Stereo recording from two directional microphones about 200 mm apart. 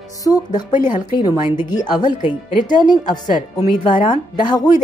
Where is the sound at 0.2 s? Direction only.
20° left (ahead or behind).